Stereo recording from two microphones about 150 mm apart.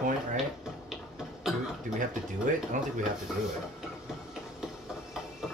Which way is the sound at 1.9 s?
60° right (ahead or behind).